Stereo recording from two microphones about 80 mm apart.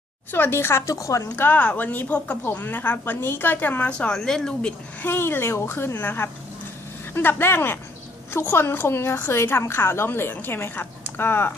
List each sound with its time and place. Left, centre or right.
0.3 s speech: left
1.4 s a woman's voice: left
2.4 s a woman's voice: left; by 4.7 s centre
5.0 s a woman's voice: left